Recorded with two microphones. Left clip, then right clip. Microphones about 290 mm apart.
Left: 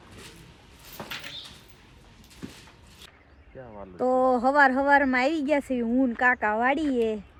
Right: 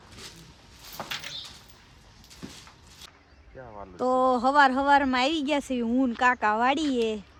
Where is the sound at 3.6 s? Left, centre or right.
Right.